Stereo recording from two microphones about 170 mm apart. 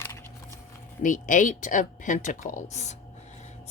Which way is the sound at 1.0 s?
50° left (ahead or behind).